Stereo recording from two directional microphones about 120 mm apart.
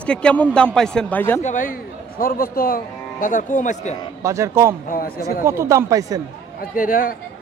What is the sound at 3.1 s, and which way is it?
Speech, 90° left.